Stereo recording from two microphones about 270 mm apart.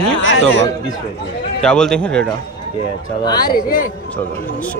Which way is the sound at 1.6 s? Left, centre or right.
Centre.